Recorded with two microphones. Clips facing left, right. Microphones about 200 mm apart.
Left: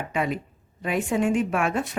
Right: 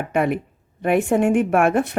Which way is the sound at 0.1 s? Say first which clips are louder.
Right 7 dB; 60° right (ahead or behind).